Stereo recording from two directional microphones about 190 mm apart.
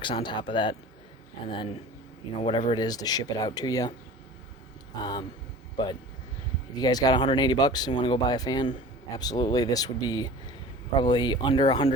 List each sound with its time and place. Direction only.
0.0 s speech: 25° left (ahead or behind)
4.9 s speech: 20° left (ahead or behind)